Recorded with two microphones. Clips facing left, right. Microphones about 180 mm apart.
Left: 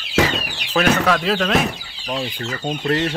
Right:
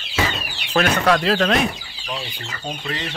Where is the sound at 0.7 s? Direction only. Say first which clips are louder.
Even; centre (ahead or behind).